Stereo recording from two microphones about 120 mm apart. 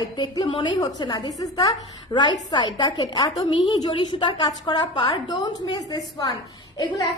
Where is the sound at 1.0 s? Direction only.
35° left (ahead or behind).